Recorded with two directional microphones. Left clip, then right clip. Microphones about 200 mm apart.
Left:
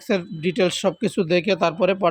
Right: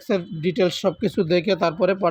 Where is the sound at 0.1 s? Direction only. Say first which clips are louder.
Even; 10° left (ahead or behind).